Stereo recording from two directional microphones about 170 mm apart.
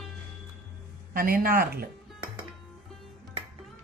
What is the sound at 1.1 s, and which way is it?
Speech, 60° right (ahead or behind).